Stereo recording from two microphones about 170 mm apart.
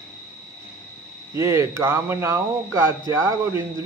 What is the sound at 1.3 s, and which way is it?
Speech, 15° right (ahead or behind).